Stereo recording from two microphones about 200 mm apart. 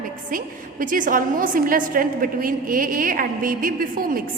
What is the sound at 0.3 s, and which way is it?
A woman's voice, 40° right (ahead or behind).